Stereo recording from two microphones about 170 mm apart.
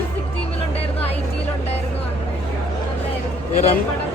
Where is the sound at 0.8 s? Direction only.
35° left (ahead or behind).